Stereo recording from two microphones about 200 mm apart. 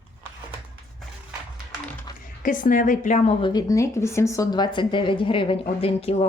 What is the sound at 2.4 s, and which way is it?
Speech, 40° left (ahead or behind).